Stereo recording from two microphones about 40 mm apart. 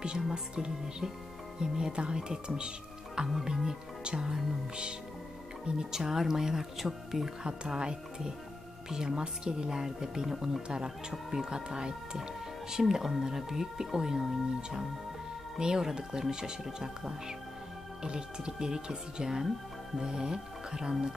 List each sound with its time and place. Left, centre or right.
0.3 s music: centre
1.6 s speech: centre
2.0 s music: right
5.8 s speech: centre
7.4 s music: right
8.9 s speech: centre
10.7 s music: centre
11.2 s speech: centre
11.5 s music: right
12.2 s speech: centre
15.6 s speech: centre
18.0 s speech: right